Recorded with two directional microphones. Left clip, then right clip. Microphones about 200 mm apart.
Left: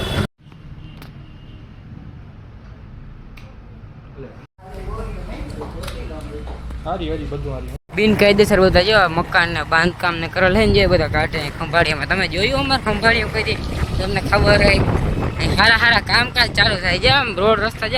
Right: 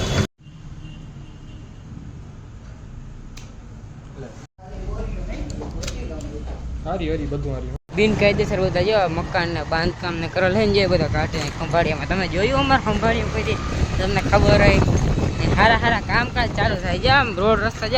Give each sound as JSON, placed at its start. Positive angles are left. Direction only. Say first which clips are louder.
{"t": 6.8, "sound": "a man's voice", "louder": "left 1 dB", "side_deg": -20}
{"t": 7.9, "sound": "speech", "louder": "left 4 dB", "side_deg": 20}
{"t": 11.7, "sound": "speech", "louder": "left 4 dB", "side_deg": 25}
{"t": 13.6, "sound": "vehicle", "louder": "even", "side_deg": 0}
{"t": 14.0, "sound": "speech", "louder": "left 1 dB", "side_deg": 15}